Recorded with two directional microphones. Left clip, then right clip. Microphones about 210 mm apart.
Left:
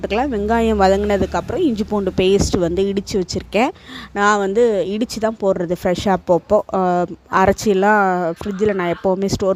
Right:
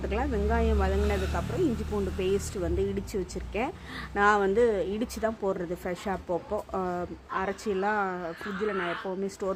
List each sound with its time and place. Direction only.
0.1 s speech: 45° left (ahead or behind)